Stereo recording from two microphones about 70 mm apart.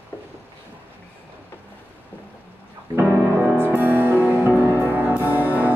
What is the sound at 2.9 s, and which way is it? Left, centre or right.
Music, right.